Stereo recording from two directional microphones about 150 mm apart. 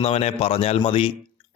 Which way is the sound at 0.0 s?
40° left (ahead or behind).